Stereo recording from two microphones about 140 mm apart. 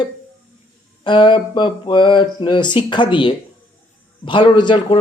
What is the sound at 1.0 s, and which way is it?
Speech, 35° left (ahead or behind).